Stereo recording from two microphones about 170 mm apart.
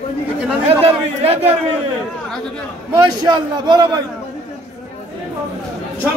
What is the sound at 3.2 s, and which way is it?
Speech, 25° right (ahead or behind).